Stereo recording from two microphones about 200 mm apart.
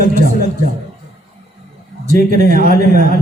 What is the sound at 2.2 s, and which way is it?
Speech, 45° right (ahead or behind).